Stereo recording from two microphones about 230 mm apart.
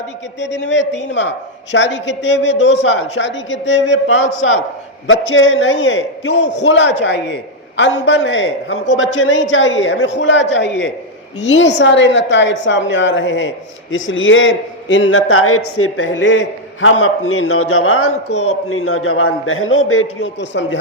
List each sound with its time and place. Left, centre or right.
0.7 s a man's voice: left
18.3 s a man's voice: left
18.7 s a man's voice: left